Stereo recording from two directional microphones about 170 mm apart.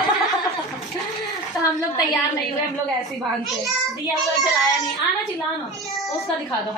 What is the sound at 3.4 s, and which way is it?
A child's voice, centre (ahead or behind).